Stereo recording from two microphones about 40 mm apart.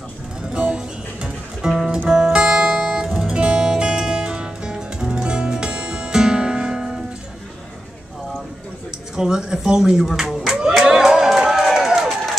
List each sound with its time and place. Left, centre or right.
0.5 s music: right
1.6 s music: centre
2.4 s music: right
9.1 s speech: centre
11.0 s music: centre
11.6 s run: centre